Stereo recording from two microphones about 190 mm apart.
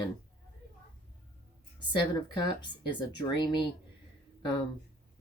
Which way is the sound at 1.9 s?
25° left (ahead or behind).